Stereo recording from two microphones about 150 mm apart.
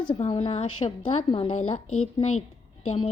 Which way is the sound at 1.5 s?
50° left (ahead or behind).